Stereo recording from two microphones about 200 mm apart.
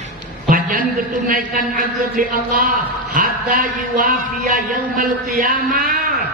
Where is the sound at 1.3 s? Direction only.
45° right (ahead or behind).